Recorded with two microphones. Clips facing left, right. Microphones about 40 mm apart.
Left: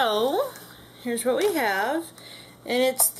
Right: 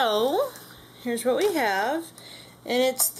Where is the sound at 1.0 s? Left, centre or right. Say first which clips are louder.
Even; centre.